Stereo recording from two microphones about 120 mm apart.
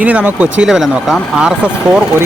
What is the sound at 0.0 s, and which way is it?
Speech, 10° right (ahead or behind).